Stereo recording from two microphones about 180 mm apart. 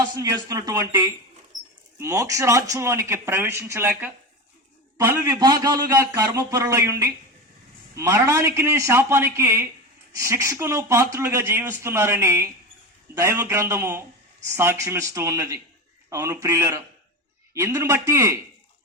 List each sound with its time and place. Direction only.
0.0 s speech: 20° right (ahead or behind)